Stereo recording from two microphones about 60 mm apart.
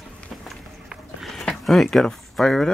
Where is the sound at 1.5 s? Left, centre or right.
Centre.